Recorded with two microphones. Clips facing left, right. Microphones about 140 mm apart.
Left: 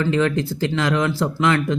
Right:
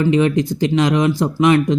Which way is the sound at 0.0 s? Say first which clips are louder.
Right 4 dB; 15° right (ahead or behind).